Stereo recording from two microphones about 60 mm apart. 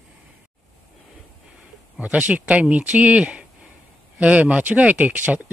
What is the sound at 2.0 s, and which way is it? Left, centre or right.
Speech, right.